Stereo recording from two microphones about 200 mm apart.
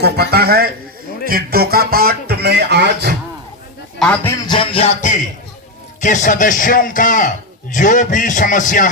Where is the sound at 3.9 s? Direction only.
5° left (ahead or behind).